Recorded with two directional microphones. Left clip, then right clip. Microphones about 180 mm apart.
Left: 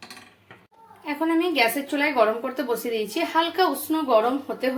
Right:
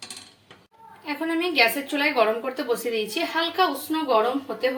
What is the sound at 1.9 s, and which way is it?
A woman's voice, centre (ahead or behind).